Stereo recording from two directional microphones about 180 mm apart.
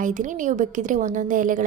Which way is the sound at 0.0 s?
45° right (ahead or behind).